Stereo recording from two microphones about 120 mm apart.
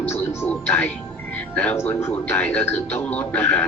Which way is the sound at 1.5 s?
15° left (ahead or behind).